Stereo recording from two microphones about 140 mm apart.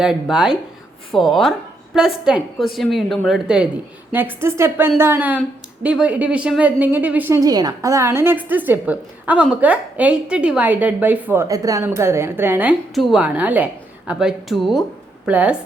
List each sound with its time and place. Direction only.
0.0 s a woman's voice: 5° right (ahead or behind)
11.4 s a woman's voice: 25° right (ahead or behind)
12.9 s a woman's voice: centre (ahead or behind)